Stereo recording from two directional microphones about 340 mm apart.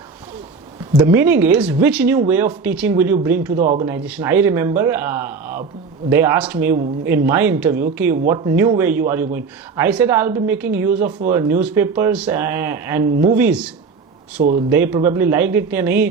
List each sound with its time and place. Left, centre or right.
0.9 s speech: centre
3.6 s speech: right
3.8 s speech: centre